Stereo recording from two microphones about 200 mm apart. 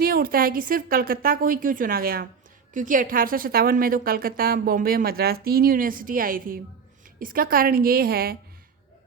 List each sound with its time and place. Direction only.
0.0 s a woman's voice: 45° right (ahead or behind)